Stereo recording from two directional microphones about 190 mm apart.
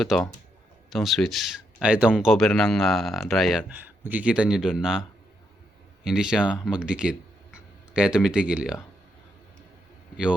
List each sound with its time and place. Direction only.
0.1 s speech: centre (ahead or behind)
6.1 s speech: 5° right (ahead or behind)